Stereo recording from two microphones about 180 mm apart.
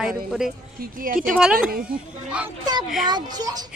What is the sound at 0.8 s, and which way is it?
Speech, 50° right (ahead or behind).